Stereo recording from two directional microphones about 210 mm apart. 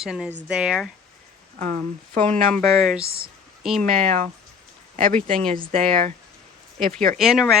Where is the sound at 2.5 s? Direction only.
Centre (ahead or behind).